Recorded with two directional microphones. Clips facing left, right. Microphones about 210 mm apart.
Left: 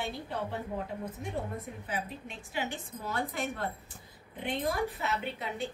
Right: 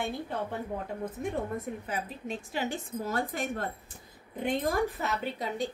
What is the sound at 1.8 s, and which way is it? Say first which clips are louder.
A woman's voice: right 2 dB; 40° right (ahead or behind).